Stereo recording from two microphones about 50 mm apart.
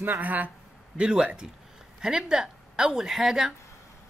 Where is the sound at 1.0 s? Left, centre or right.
Centre.